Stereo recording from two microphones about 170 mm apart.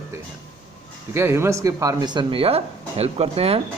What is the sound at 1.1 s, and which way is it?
Speech, 15° right (ahead or behind).